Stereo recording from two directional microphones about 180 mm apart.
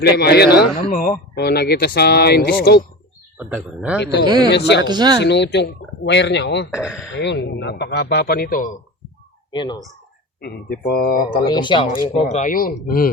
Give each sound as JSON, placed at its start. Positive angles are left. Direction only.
{"t": 0.0, "sound": "speech", "side_deg": 65}
{"t": 0.9, "sound": "speech", "side_deg": 50}
{"t": 3.3, "sound": "speech", "side_deg": -10}
{"t": 4.0, "sound": "a man's voice", "side_deg": 70}
{"t": 4.8, "sound": "speech", "side_deg": -25}
{"t": 5.2, "sound": "a man's voice", "side_deg": 70}
{"t": 6.7, "sound": "speech", "side_deg": -5}
{"t": 7.2, "sound": "a man's voice", "side_deg": 75}
{"t": 9.5, "sound": "speech", "side_deg": 25}
{"t": 10.4, "sound": "speech", "side_deg": 60}
{"t": 11.3, "sound": "speech", "side_deg": 25}
{"t": 12.0, "sound": "speech", "side_deg": 40}